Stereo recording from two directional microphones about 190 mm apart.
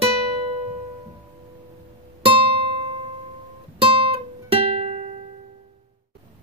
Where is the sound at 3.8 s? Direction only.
30° right (ahead or behind).